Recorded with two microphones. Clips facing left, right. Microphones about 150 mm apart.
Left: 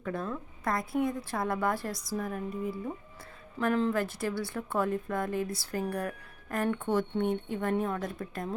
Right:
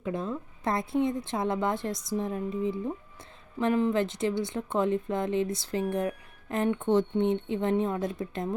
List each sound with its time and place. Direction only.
0.0 s speech: 20° right (ahead or behind)